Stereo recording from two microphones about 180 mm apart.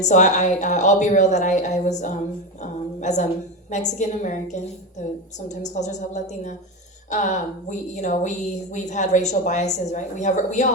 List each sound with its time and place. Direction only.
0.1 s a woman's voice: 40° left (ahead or behind)